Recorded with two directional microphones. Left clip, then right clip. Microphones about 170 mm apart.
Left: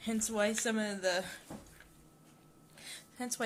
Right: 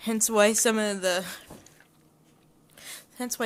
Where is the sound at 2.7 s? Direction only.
40° right (ahead or behind).